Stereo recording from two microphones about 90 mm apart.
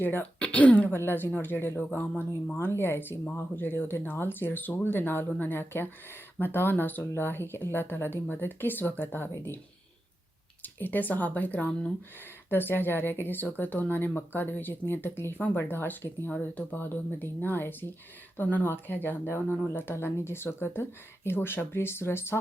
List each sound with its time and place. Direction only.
0.0 s speech: 20° left (ahead or behind)
10.6 s speech: 20° left (ahead or behind)